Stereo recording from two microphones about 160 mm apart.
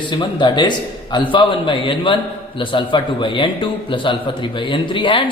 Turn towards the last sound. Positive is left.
turn(degrees=30)  # may be behind; listen again after turning